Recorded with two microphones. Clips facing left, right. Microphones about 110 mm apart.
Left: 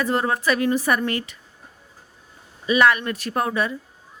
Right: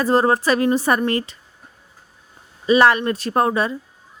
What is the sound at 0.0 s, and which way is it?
Speech, 35° right (ahead or behind).